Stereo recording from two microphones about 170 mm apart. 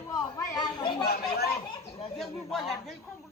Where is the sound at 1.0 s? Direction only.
65° left (ahead or behind).